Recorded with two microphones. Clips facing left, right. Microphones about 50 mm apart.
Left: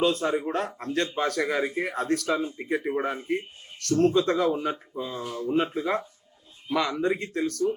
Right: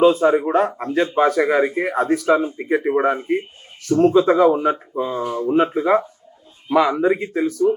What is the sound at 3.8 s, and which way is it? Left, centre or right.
A man's voice, centre.